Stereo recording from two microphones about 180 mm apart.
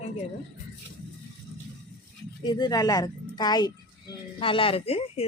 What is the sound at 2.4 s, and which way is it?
Speech, 25° left (ahead or behind).